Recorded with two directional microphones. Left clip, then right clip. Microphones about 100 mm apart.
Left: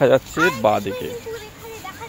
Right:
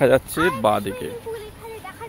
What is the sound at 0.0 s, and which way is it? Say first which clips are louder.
Speech: left 1 dB; 25° right (ahead or behind).